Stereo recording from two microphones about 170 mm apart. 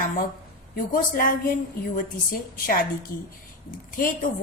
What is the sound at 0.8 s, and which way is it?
Speech, 55° left (ahead or behind).